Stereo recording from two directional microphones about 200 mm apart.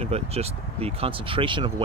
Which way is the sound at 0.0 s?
30° right (ahead or behind).